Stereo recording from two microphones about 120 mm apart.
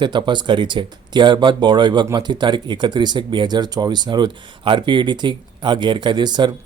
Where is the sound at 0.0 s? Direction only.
40° right (ahead or behind).